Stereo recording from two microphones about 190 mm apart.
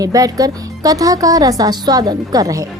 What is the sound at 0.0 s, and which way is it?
Speech, 20° right (ahead or behind).